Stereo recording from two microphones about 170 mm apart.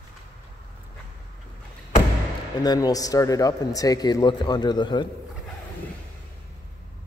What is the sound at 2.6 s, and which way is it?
A man's voice, 20° left (ahead or behind).